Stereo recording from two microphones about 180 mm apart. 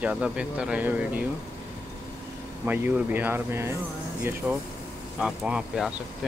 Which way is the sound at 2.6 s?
10° right (ahead or behind).